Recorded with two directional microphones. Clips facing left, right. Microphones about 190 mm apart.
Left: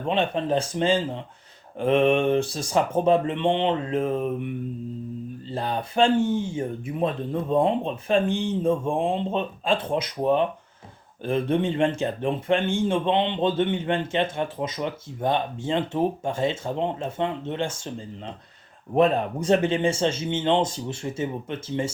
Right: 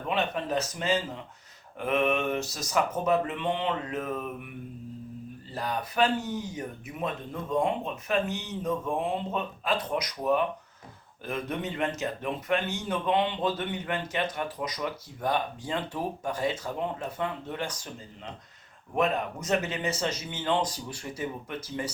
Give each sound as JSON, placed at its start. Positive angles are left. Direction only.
{"t": 0.0, "sound": "speech", "side_deg": 30}
{"t": 5.5, "sound": "speech", "side_deg": 25}
{"t": 18.9, "sound": "speech", "side_deg": 30}